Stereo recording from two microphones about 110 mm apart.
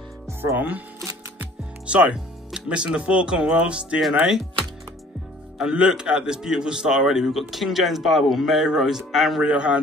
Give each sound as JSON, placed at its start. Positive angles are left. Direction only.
{"t": 0.3, "sound": "speech", "side_deg": -20}
{"t": 1.9, "sound": "speech", "side_deg": -10}
{"t": 5.6, "sound": "a man's voice", "side_deg": -5}